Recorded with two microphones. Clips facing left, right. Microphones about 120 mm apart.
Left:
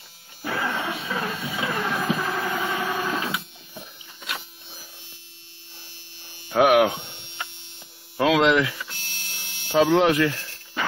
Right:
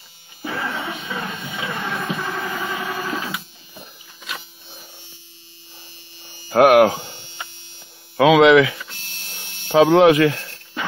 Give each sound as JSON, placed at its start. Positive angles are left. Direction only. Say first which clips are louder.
{"t": 0.4, "sound": "music", "louder": "even", "side_deg": 0}
{"t": 5.8, "sound": "a sound", "louder": "right 2 dB", "side_deg": 0}
{"t": 6.5, "sound": "speech", "louder": "right 5 dB", "side_deg": -60}
{"t": 6.9, "sound": "hum", "louder": "right 5 dB", "side_deg": 0}
{"t": 8.2, "sound": "mains hum", "louder": "right 7 dB", "side_deg": -90}
{"t": 8.7, "sound": "hum", "louder": "even", "side_deg": 0}
{"t": 9.7, "sound": "speech", "louder": "right 6 dB", "side_deg": -60}
{"t": 10.4, "sound": "a sound", "louder": "right 3 dB", "side_deg": 0}